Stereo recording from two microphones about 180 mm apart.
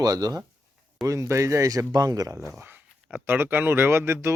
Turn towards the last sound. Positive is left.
turn(degrees=-15)  # may be behind; listen again after turning